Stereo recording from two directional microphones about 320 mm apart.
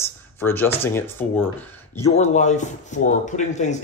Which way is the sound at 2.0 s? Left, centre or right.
Left.